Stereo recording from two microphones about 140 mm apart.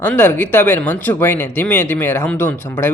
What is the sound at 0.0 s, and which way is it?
A woman's voice, 15° left (ahead or behind).